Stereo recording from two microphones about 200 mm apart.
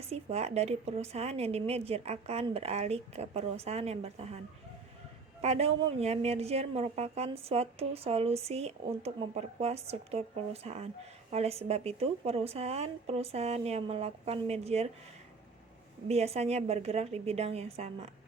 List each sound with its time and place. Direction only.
0.1 s a woman's voice: 30° right (ahead or behind)
5.4 s a woman's voice: 30° right (ahead or behind)
16.0 s a woman's voice: 30° right (ahead or behind)